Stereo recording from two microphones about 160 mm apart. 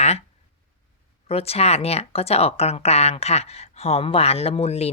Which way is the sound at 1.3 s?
40° left (ahead or behind).